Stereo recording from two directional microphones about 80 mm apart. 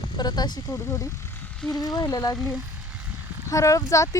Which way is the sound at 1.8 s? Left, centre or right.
Left.